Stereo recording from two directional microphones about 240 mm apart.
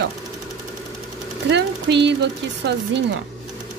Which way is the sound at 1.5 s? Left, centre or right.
Right.